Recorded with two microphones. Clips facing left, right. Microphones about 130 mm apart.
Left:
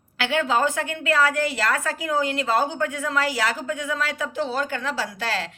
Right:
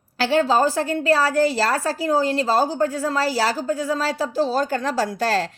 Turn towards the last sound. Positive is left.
turn(degrees=-40)  # may be behind; listen again after turning